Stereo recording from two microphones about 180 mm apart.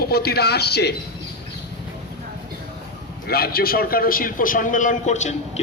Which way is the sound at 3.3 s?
60° left (ahead or behind).